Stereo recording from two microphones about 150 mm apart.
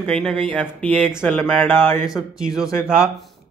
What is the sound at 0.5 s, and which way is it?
Speech, 10° left (ahead or behind).